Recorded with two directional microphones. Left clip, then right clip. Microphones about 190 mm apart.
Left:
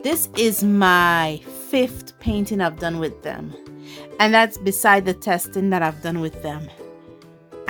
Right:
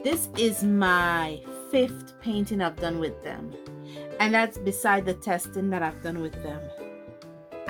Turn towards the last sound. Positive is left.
turn(degrees=45)  # may be behind; listen again after turning